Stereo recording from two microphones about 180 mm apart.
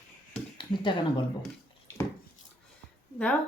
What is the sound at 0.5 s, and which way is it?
Speech, 25° left (ahead or behind).